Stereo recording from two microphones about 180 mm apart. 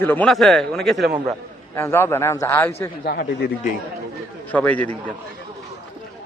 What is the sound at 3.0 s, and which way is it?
Speech, 60° left (ahead or behind).